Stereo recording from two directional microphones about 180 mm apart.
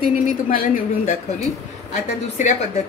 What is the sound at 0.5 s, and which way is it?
Speech, 50° left (ahead or behind).